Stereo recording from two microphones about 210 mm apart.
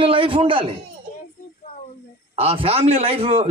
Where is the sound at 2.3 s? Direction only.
25° right (ahead or behind).